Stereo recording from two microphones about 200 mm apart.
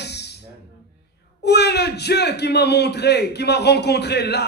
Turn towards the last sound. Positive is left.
turn(degrees=55)  # may be behind; listen again after turning